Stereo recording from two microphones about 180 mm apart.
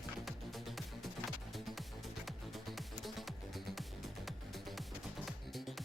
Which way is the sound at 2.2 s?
Centre (ahead or behind).